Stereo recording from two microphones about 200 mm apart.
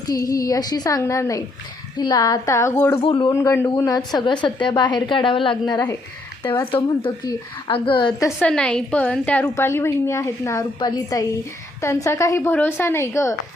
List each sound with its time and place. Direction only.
0.1 s a woman's voice: 15° left (ahead or behind)
3.0 s a woman's voice: 25° left (ahead or behind)
8.4 s a woman's voice: 5° left (ahead or behind)